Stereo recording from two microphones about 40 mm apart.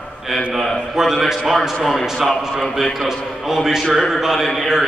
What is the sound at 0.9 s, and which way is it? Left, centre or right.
A man's voice, centre.